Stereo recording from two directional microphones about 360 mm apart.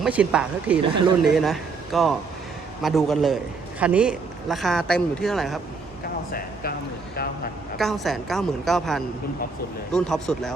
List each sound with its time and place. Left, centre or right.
0.0 s a woman's voice: centre
6.3 s speech: left
7.8 s a woman's voice: centre